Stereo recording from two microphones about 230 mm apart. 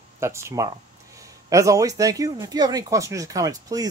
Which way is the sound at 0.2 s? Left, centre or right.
Centre.